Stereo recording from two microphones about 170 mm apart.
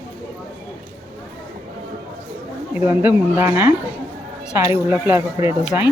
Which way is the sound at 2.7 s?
10° right (ahead or behind).